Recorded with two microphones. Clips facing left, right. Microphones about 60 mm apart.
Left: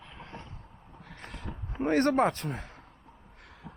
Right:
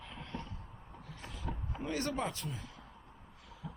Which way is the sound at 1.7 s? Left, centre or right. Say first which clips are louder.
Left 12 dB; left.